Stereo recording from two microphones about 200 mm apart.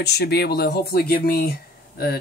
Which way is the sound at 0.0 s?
55° left (ahead or behind).